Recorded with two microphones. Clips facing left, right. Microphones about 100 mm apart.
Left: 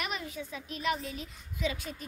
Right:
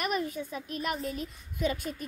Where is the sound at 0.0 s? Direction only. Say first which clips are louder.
Right 6 dB; 45° right (ahead or behind).